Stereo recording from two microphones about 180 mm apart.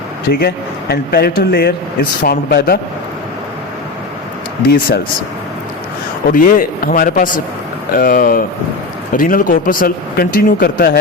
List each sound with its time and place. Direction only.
0.3 s speech: 60° left (ahead or behind)
6.3 s speech: 50° left (ahead or behind)